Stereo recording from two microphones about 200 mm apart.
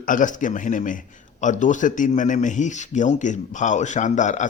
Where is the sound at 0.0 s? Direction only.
40° left (ahead or behind).